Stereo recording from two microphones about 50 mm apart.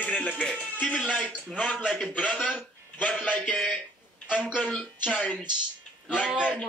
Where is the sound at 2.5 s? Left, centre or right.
Left.